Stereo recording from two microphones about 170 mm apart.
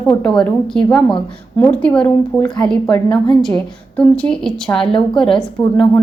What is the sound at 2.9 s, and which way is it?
Speech, 25° left (ahead or behind).